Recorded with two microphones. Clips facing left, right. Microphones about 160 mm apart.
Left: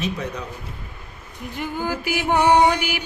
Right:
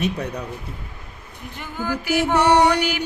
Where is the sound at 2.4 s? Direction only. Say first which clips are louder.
Left 1 dB; 75° right (ahead or behind).